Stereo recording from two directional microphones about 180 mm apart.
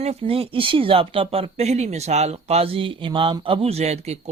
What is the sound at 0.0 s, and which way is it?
Speech, 35° right (ahead or behind).